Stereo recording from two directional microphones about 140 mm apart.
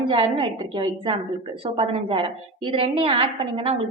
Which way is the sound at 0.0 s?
35° right (ahead or behind).